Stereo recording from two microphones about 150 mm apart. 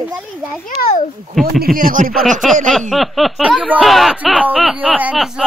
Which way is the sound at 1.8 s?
65° right (ahead or behind).